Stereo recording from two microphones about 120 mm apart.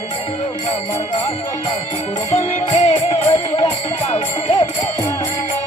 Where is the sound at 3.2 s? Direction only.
40° left (ahead or behind).